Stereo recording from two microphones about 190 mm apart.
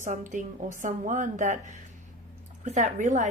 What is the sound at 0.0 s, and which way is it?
A woman's voice, 40° right (ahead or behind).